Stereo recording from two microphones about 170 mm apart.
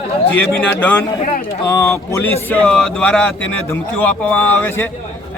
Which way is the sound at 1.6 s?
15° left (ahead or behind).